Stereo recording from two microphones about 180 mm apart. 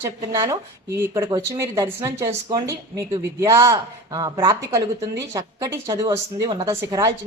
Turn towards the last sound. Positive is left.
turn(degrees=-20)  # may be behind; listen again after turning